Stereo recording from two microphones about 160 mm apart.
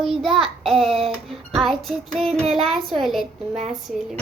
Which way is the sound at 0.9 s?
35° right (ahead or behind).